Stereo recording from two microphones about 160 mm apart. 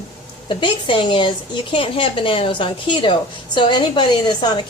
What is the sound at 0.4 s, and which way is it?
A woman's voice, 30° left (ahead or behind).